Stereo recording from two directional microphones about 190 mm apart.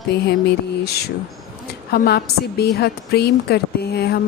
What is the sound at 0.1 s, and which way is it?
Speech, 60° left (ahead or behind).